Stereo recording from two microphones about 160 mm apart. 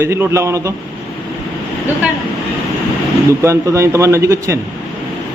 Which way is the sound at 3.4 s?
20° right (ahead or behind).